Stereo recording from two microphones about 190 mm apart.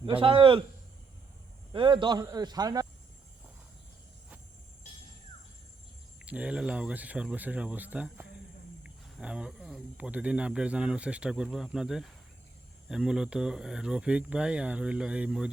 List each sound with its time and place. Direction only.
0.0 s a man's voice: 30° right (ahead or behind)
1.7 s a man's voice: 25° right (ahead or behind)
6.2 s speech: 5° right (ahead or behind)